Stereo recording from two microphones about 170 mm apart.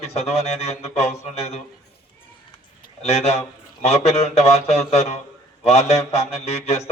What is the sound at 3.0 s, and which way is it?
A man's voice, 40° left (ahead or behind).